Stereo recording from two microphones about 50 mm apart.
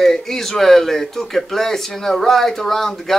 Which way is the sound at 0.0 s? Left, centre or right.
Centre.